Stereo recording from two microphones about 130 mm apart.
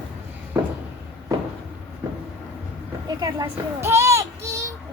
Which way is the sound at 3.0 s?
30° right (ahead or behind).